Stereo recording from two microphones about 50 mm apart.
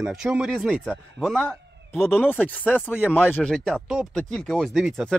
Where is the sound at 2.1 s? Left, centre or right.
Left.